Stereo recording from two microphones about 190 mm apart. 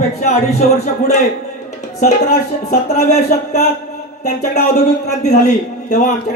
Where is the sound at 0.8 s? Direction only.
35° left (ahead or behind).